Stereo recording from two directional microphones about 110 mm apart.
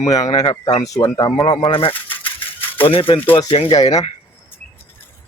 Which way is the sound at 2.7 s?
55° left (ahead or behind).